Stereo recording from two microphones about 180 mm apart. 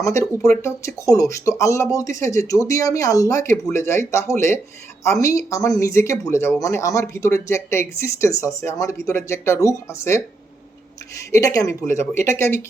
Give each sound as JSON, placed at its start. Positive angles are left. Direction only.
{"t": 0.0, "sound": "speech", "side_deg": 15}